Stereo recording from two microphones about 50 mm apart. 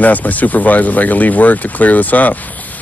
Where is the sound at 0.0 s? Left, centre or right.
Left.